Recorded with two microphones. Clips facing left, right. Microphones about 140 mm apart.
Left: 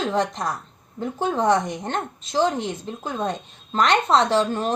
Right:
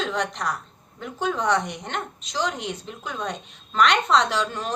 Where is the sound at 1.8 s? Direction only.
45° left (ahead or behind).